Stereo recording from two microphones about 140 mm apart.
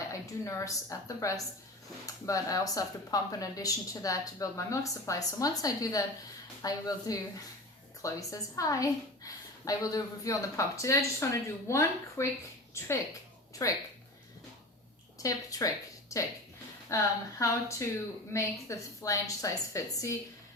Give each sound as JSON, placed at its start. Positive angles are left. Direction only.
{"t": 0.1, "sound": "a woman's voice", "side_deg": 25}
{"t": 13.6, "sound": "a woman's voice", "side_deg": 20}
{"t": 15.2, "sound": "a woman's voice", "side_deg": 25}